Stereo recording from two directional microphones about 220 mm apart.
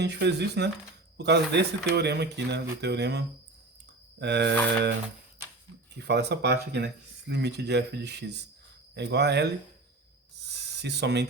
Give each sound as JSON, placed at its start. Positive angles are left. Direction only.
{"t": 0.0, "sound": "speech", "side_deg": -50}
{"t": 6.0, "sound": "speech", "side_deg": -50}
{"t": 10.5, "sound": "a sound", "side_deg": -50}